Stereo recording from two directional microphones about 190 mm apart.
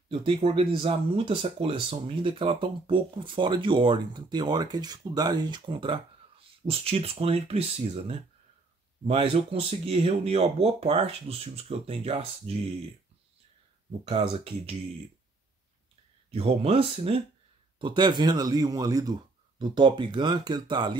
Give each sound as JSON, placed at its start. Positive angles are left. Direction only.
{"t": 0.1, "sound": "speech", "side_deg": -30}
{"t": 14.0, "sound": "speech", "side_deg": -30}
{"t": 16.3, "sound": "speech", "side_deg": -35}